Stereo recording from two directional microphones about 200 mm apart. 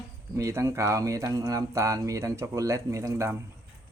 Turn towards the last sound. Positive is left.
turn(degrees=-15)  # may be behind; listen again after turning